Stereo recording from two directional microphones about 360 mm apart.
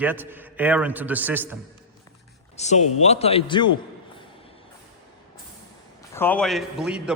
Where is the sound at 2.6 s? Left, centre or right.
Centre.